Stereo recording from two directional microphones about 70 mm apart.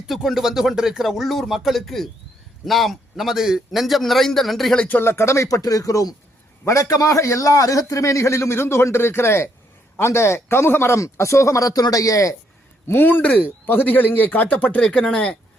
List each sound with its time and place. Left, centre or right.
0.1 s a man's voice: centre
4.9 s a man's voice: left
12.9 s a man's voice: left